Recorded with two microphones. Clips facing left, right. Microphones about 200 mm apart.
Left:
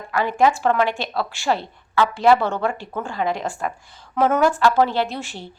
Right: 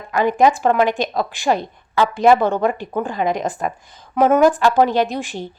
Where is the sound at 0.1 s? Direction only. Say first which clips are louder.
Right 3 dB; 20° right (ahead or behind).